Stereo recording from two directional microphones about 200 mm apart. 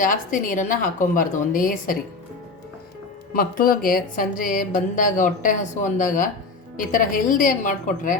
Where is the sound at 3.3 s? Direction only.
45° left (ahead or behind).